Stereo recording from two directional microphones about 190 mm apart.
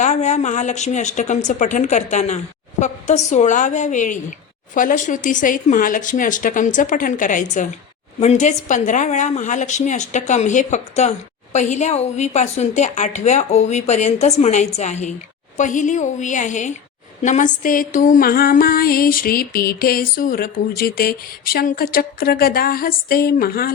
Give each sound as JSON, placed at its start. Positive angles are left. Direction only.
{"t": 0.0, "sound": "a woman's voice", "side_deg": 40}
{"t": 4.7, "sound": "music", "side_deg": 45}
{"t": 8.2, "sound": "a woman's voice", "side_deg": 35}
{"t": 17.2, "sound": "music", "side_deg": 40}